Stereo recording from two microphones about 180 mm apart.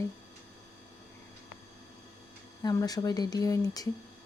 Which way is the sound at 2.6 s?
20° left (ahead or behind).